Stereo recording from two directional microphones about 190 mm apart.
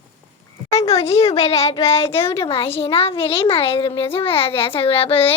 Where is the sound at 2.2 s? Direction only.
30° left (ahead or behind).